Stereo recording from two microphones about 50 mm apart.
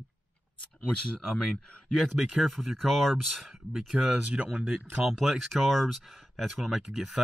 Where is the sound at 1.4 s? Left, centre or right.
Centre.